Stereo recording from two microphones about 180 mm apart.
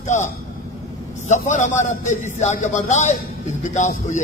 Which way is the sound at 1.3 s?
40° left (ahead or behind).